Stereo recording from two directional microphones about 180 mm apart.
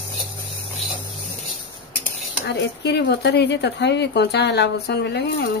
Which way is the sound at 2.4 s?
70° left (ahead or behind).